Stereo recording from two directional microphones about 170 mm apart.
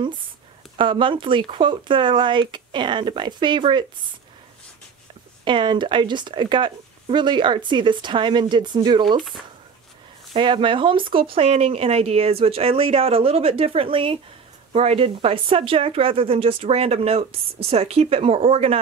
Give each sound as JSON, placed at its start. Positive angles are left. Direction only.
{"t": 0.7, "sound": "speech", "side_deg": -30}
{"t": 5.4, "sound": "speech", "side_deg": -30}
{"t": 10.3, "sound": "a woman's voice", "side_deg": -30}